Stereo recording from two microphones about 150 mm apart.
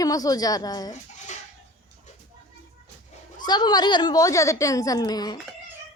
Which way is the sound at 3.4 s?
30° left (ahead or behind).